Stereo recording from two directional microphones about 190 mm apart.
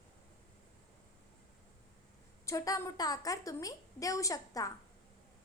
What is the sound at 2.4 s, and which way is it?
A woman's voice, 20° left (ahead or behind).